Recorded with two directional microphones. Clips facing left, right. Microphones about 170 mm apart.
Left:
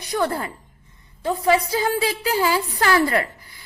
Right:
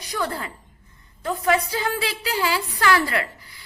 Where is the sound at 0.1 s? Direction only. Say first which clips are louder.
Left 5 dB; 40° left (ahead or behind).